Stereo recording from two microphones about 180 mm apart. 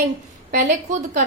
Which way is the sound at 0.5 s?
45° right (ahead or behind).